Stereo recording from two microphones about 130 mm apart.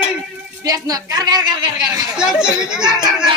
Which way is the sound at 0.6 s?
30° right (ahead or behind).